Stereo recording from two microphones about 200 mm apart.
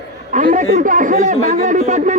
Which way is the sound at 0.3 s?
40° right (ahead or behind).